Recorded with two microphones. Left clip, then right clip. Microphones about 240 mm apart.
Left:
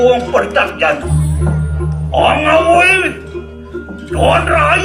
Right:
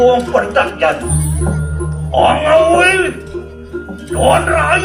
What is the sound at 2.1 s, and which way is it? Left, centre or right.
A man's voice, left.